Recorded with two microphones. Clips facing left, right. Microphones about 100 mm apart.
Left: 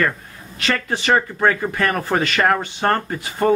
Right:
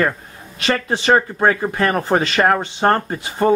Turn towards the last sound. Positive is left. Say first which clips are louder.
# right 2 dB
turn(degrees=-25)  # may be behind; listen again after turning